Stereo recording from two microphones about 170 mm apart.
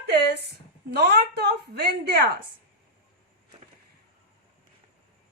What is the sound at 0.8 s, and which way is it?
A man's voice, 70° right (ahead or behind).